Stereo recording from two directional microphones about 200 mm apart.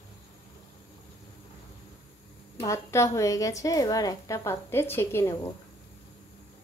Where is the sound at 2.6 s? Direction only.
15° left (ahead or behind).